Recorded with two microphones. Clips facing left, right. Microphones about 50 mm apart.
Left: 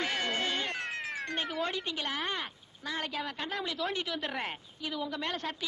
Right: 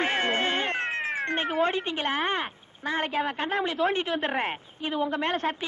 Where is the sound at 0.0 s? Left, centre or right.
Right.